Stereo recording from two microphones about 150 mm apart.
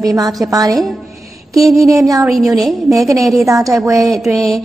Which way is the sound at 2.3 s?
Centre (ahead or behind).